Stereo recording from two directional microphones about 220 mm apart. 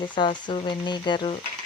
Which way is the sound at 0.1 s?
20° left (ahead or behind).